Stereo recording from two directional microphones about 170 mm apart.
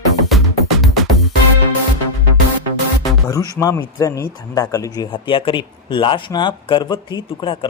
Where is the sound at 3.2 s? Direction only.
20° left (ahead or behind).